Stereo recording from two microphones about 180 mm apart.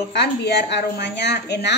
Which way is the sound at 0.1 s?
70° left (ahead or behind).